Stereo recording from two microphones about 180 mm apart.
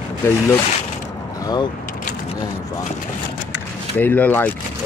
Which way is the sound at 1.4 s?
20° left (ahead or behind).